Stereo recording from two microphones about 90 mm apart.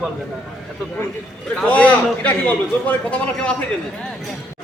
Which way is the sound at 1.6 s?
15° left (ahead or behind).